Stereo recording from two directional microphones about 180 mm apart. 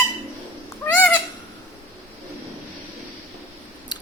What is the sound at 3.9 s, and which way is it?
Scissors, 25° left (ahead or behind).